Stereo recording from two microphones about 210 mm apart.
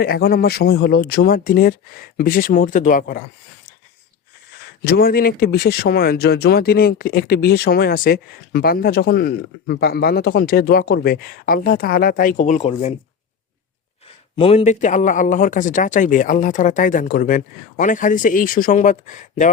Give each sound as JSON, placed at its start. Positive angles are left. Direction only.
{"t": 0.0, "sound": "a man's voice", "side_deg": 45}
{"t": 4.8, "sound": "speech", "side_deg": 45}
{"t": 14.3, "sound": "a man's voice", "side_deg": 30}